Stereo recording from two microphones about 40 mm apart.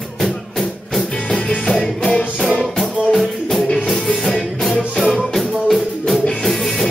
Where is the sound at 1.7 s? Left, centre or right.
Centre.